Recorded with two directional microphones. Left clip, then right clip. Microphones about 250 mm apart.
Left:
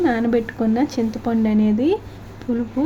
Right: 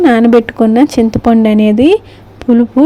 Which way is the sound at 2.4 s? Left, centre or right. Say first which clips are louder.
Right 14 dB; right.